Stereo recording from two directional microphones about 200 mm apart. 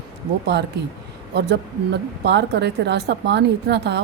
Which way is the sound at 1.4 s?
55° right (ahead or behind).